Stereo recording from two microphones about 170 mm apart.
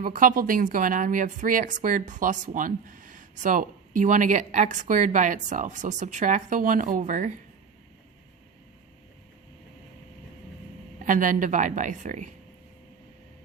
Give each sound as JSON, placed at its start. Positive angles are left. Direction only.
{"t": 0.0, "sound": "a woman's voice", "side_deg": -55}
{"t": 11.0, "sound": "a woman's voice", "side_deg": -50}